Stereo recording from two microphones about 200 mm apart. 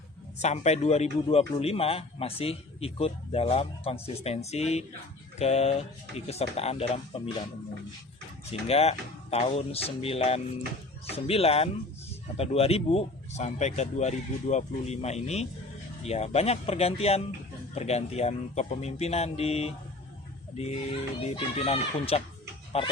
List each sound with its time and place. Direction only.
0.3 s a man's voice: 35° left (ahead or behind)
8.6 s a man's voice: 30° left (ahead or behind)
21.2 s a man's voice: 30° left (ahead or behind)